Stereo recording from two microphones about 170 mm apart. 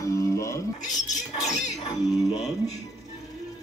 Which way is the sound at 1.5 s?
40° left (ahead or behind).